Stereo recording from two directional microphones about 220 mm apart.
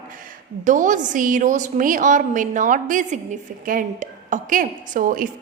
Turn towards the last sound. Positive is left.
turn(degrees=-40)  # may be behind; listen again after turning